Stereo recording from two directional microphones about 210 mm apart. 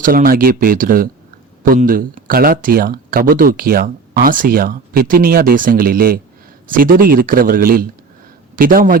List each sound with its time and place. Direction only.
0.0 s speech: 40° right (ahead or behind)